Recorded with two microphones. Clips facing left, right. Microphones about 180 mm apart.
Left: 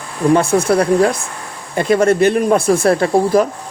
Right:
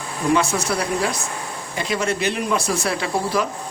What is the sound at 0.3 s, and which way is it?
A man's voice, 55° left (ahead or behind).